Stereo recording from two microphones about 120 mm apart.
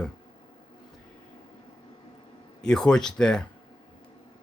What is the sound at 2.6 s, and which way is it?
Speech, 5° left (ahead or behind).